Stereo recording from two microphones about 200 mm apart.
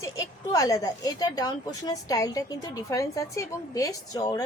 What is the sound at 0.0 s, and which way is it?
A woman's voice, 15° left (ahead or behind).